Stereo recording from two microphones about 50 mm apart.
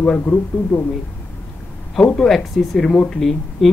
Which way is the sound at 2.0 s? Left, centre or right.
Centre.